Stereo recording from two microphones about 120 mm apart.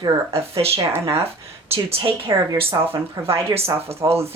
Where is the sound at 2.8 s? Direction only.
20° right (ahead or behind).